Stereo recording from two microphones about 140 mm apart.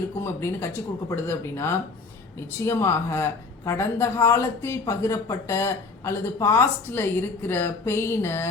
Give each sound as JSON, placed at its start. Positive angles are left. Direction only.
{"t": 0.2, "sound": "speech", "side_deg": 20}